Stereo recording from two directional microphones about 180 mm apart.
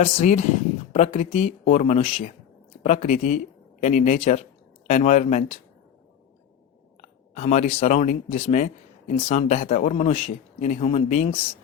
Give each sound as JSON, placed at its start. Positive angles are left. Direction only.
{"t": 0.0, "sound": "speech", "side_deg": 35}
{"t": 7.0, "sound": "speech", "side_deg": 40}